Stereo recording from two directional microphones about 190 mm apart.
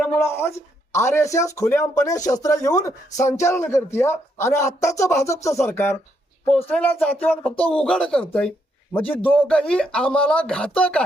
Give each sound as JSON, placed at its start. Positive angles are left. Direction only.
{"t": 0.2, "sound": "a man's voice", "side_deg": 15}